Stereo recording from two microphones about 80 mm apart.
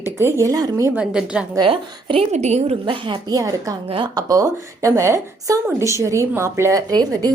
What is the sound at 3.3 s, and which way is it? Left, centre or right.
A woman's voice, right.